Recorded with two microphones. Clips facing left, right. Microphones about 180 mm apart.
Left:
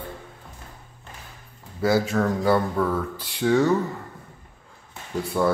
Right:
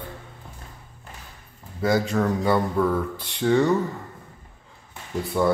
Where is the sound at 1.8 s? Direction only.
5° left (ahead or behind).